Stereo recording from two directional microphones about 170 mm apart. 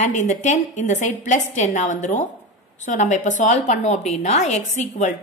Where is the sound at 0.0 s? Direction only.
45° left (ahead or behind).